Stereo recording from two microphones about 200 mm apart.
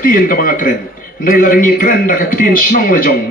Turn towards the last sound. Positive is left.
turn(degrees=45)  # may be behind; listen again after turning